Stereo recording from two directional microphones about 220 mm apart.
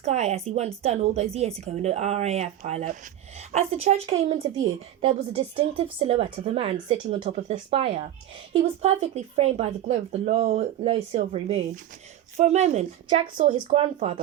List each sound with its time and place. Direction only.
0.0 s speech: 30° right (ahead or behind)